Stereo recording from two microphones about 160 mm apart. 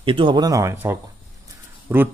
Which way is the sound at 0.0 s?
30° right (ahead or behind).